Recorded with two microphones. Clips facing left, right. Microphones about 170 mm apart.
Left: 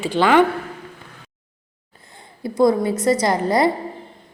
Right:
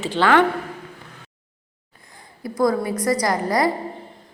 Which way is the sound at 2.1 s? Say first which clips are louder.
Left 3 dB; 25° left (ahead or behind).